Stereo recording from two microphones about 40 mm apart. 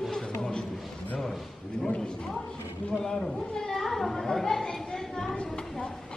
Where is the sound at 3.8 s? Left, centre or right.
Centre.